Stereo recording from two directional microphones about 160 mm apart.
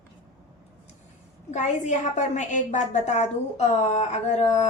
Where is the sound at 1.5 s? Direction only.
50° left (ahead or behind).